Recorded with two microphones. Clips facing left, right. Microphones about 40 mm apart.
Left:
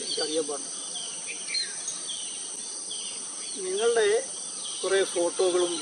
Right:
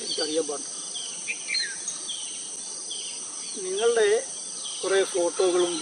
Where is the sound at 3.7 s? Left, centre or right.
Centre.